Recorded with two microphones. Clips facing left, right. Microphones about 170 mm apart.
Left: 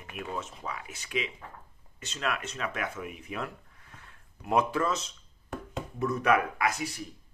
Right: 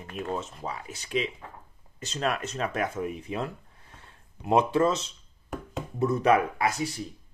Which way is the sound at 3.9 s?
30° right (ahead or behind).